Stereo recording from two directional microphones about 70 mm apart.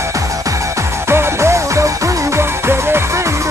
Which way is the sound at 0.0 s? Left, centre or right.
Right.